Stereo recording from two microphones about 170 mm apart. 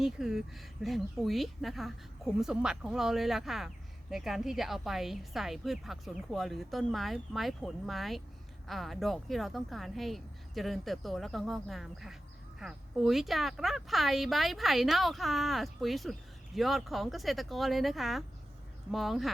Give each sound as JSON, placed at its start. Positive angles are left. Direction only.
{"t": 0.0, "sound": "a woman's voice", "side_deg": 0}